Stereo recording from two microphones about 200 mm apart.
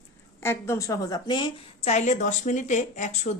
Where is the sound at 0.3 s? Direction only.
10° left (ahead or behind).